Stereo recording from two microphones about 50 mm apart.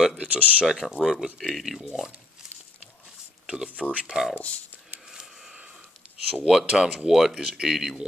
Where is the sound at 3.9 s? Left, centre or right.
Right.